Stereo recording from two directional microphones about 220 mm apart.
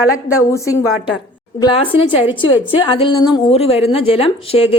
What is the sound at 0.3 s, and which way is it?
A woman's voice, 15° left (ahead or behind).